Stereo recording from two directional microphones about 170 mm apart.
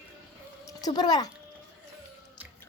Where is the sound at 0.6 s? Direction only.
25° left (ahead or behind).